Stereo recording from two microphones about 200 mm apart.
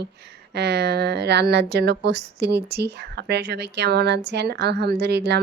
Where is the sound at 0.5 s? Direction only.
55° right (ahead or behind).